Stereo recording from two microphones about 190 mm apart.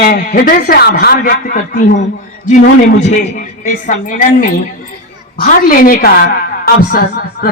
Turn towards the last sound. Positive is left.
turn(degrees=50)  # may be behind; listen again after turning